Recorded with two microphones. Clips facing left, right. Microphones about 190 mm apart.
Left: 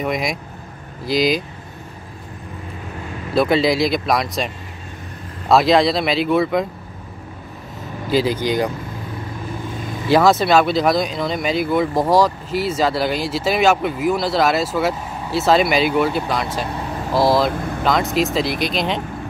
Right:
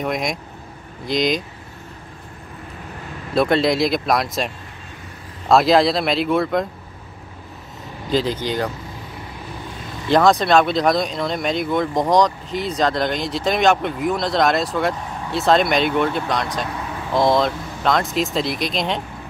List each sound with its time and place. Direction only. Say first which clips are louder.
0.0 s speech: left 1 dB; centre (ahead or behind)
3.3 s speech: left 1 dB; centre (ahead or behind)
5.5 s speech: even; centre (ahead or behind)
8.1 s speech: left 3 dB; 10° left (ahead or behind)
10.0 s speech: left 1 dB; 5° left (ahead or behind)
17.5 s speech: left 4 dB; 55° left (ahead or behind)
17.8 s speech: left 1 dB; centre (ahead or behind)